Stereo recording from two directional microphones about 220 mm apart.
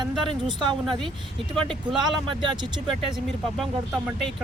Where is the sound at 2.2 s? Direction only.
20° right (ahead or behind).